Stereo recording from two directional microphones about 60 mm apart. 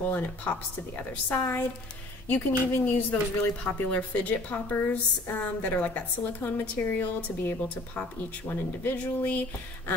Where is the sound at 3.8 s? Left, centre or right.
Left.